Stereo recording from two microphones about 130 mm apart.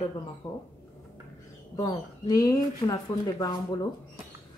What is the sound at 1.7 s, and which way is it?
A woman's voice, 30° left (ahead or behind).